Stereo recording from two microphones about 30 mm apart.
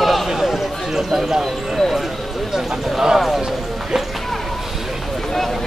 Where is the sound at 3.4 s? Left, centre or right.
Centre.